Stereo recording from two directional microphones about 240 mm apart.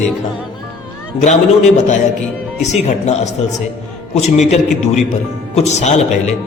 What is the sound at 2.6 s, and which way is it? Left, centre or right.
Speech, left.